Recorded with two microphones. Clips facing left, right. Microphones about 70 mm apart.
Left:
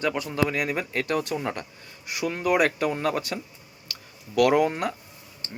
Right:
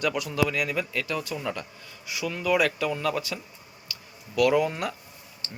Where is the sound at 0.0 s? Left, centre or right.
Left.